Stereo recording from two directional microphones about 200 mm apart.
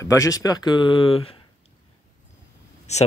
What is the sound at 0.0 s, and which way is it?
Speech, 15° left (ahead or behind).